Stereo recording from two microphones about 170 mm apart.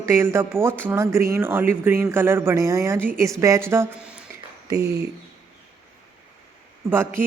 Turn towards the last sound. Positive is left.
turn(degrees=-15)  # may be behind; listen again after turning